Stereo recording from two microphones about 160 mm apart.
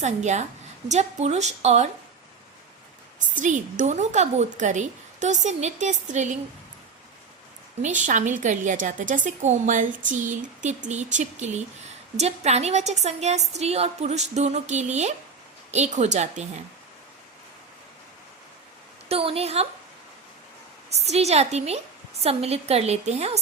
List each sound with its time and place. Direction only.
0.0 s a woman's voice: 45° right (ahead or behind)
3.2 s a woman's voice: 50° right (ahead or behind)
8.0 s a woman's voice: 50° right (ahead or behind)
19.0 s a woman's voice: 40° right (ahead or behind)
21.1 s a woman's voice: 40° right (ahead or behind)